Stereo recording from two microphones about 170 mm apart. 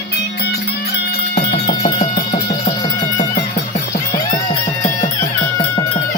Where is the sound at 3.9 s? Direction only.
25° left (ahead or behind).